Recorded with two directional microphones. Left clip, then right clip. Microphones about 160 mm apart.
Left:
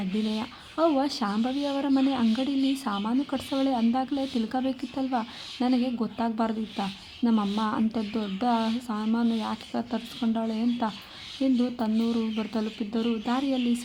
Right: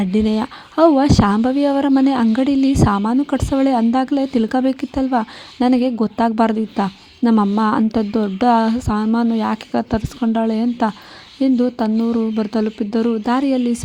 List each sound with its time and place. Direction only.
0.0 s speech: 55° right (ahead or behind)